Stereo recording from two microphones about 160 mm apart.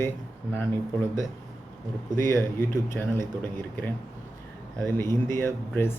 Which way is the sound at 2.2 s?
25° right (ahead or behind).